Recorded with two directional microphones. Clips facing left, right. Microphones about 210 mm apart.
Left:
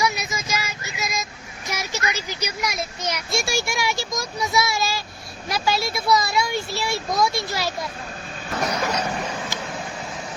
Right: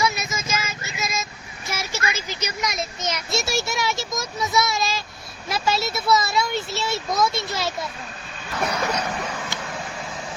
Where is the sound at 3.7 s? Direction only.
Centre (ahead or behind).